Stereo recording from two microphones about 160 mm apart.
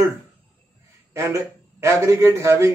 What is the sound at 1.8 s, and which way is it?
Speech, 15° right (ahead or behind).